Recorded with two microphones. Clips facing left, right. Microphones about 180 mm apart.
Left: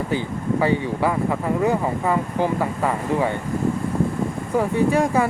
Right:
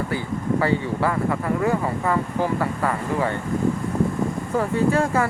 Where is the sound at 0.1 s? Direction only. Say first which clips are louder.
Left 1 dB; 20° left (ahead or behind).